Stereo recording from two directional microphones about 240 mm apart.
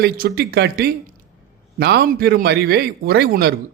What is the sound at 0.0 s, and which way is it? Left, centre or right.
Speech, right.